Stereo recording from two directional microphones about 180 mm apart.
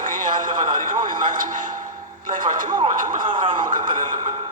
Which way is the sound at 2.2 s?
50° right (ahead or behind).